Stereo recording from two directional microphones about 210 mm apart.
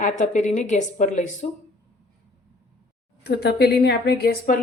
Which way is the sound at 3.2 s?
50° left (ahead or behind).